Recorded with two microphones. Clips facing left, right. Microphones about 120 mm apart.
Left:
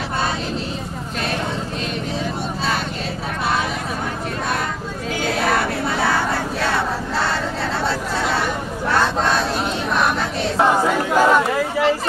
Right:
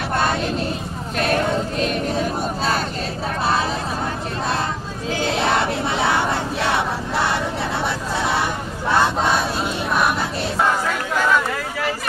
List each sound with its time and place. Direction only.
1.2 s vehicle: 50° right (ahead or behind)
5.3 s crowd: 25° right (ahead or behind)
8.9 s a sound: 15° right (ahead or behind)
11.1 s chatter: 25° left (ahead or behind)